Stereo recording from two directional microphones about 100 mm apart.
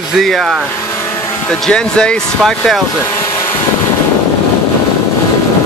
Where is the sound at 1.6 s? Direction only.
10° left (ahead or behind).